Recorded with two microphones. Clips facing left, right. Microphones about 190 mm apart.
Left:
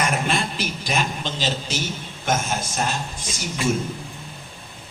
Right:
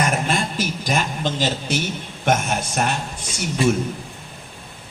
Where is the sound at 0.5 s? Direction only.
45° right (ahead or behind); by 2.9 s 65° right (ahead or behind).